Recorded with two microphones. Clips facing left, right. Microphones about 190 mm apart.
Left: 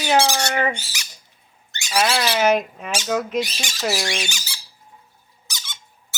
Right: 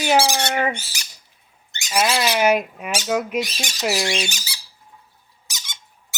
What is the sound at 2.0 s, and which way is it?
Speech, 15° right (ahead or behind).